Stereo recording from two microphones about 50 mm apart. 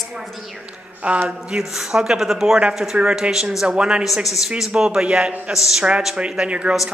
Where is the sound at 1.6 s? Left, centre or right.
Centre.